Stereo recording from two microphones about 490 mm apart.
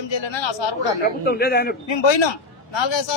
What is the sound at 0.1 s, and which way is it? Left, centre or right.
Speech, left.